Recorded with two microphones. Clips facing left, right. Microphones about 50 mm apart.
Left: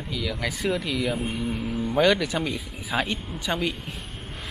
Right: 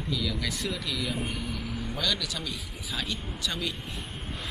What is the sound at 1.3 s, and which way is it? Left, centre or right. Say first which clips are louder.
Speech: left 6 dB; left.